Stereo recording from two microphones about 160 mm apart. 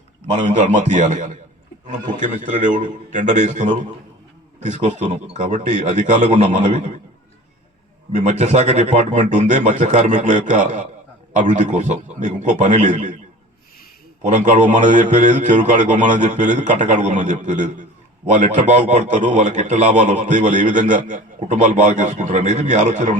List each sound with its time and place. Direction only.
0.6 s a man's voice: 50° right (ahead or behind)
8.1 s a man's voice: 45° right (ahead or behind)
14.3 s a man's voice: 50° right (ahead or behind)